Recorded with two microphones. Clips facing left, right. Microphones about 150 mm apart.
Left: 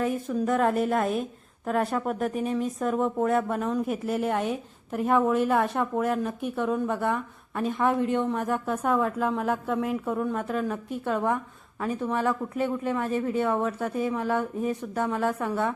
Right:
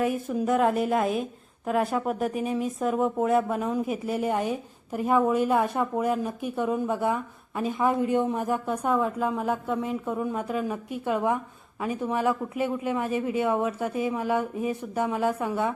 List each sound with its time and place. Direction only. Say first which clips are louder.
0.0 s a woman's voice: right 1 dB; 10° right (ahead or behind)
8.2 s speech: right 1 dB; 15° right (ahead or behind)
8.4 s a woman's voice: even; centre (ahead or behind); by 15.6 s 15° right (ahead or behind)